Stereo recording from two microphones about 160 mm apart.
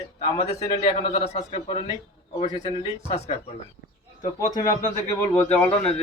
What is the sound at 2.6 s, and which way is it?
Speech, 40° left (ahead or behind).